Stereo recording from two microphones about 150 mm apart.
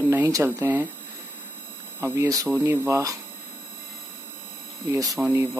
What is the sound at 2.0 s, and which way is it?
Speech, 20° right (ahead or behind).